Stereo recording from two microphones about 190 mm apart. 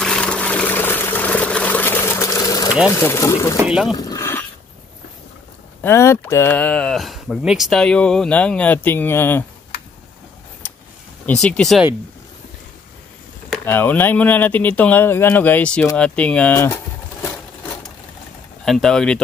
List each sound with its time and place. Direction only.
0.0 s a sound: 5° left (ahead or behind)
2.9 s speech: 15° left (ahead or behind)
3.5 s speech: 5° right (ahead or behind)
3.9 s a sound: 20° left (ahead or behind)
5.8 s speech: 15° left (ahead or behind)
11.2 s speech: 5° left (ahead or behind)
13.5 s speech: 10° left (ahead or behind)
18.7 s speech: centre (ahead or behind)